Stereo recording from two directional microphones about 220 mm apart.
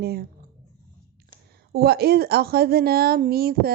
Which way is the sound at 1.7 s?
45° right (ahead or behind).